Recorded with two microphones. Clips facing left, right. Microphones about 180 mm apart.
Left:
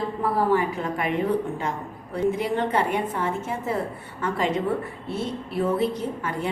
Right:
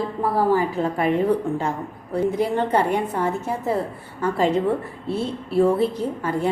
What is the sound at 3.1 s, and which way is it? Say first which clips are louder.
A woman's voice: right 3 dB; 35° right (ahead or behind).